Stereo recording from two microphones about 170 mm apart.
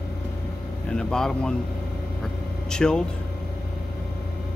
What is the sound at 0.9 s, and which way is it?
Speech, 5° left (ahead or behind).